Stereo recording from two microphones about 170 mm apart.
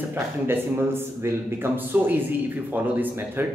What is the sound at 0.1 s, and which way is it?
A man's voice, 15° right (ahead or behind).